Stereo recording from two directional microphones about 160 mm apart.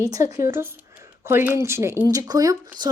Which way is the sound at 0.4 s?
15° right (ahead or behind).